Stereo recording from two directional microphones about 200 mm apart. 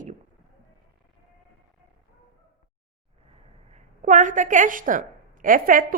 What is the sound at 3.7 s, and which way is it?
A woman's voice, 35° right (ahead or behind).